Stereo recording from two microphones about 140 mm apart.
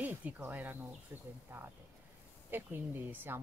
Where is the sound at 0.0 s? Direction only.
10° right (ahead or behind).